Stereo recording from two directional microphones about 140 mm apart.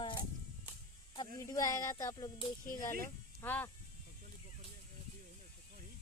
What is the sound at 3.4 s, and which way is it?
Speech, 15° left (ahead or behind).